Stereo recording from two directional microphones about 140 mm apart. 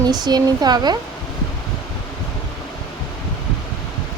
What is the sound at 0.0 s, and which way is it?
Speech, 30° right (ahead or behind).